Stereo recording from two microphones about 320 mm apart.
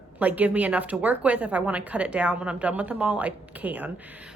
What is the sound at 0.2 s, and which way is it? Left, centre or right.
Speech, centre.